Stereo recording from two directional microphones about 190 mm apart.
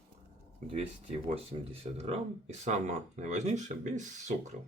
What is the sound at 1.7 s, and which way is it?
Speech, 30° right (ahead or behind).